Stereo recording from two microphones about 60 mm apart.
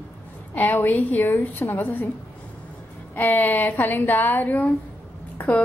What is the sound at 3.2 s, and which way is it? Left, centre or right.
A woman's voice, left.